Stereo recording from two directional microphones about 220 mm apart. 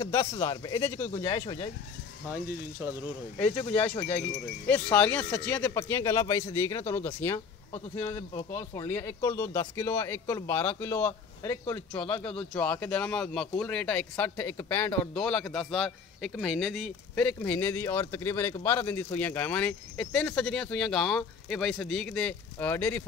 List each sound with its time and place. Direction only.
0.0 s speech: 15° left (ahead or behind)
2.2 s speech: 10° right (ahead or behind)
3.5 s speech: 25° left (ahead or behind)
4.6 s speech: 5° left (ahead or behind)
7.7 s a man's voice: 25° left (ahead or behind); by 23.0 s 10° left (ahead or behind)